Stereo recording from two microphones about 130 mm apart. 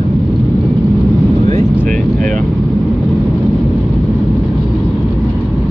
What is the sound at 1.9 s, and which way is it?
Vehicle, 80° right.